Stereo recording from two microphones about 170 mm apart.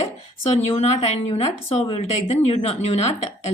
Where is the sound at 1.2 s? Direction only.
35° left (ahead or behind).